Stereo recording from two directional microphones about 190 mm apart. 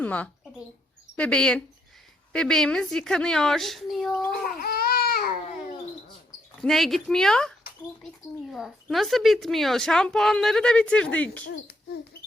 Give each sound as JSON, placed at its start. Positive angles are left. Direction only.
{"t": 0.0, "sound": "a woman's voice", "side_deg": 10}
{"t": 4.4, "sound": "baby cry", "side_deg": 50}
{"t": 6.6, "sound": "a woman's voice", "side_deg": 0}